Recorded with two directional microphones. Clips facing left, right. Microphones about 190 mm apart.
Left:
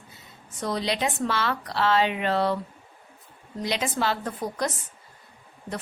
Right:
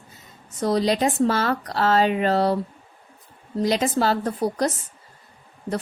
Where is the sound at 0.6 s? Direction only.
40° right (ahead or behind).